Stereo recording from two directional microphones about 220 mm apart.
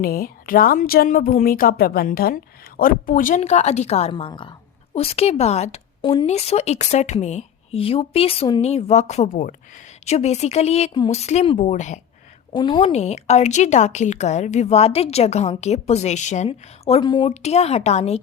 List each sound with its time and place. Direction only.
0.0 s a woman's voice: 40° left (ahead or behind)
12.5 s a woman's voice: 20° left (ahead or behind)